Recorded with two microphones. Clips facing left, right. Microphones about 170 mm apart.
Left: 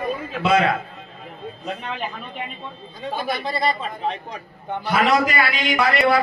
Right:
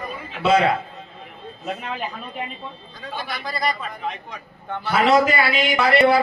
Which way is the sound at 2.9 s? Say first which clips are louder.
Left 6 dB; 25° left (ahead or behind).